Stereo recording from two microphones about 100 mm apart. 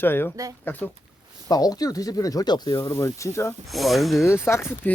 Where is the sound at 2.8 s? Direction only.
30° left (ahead or behind).